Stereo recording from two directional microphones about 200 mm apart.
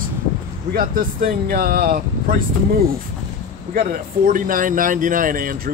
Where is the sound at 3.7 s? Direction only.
45° right (ahead or behind).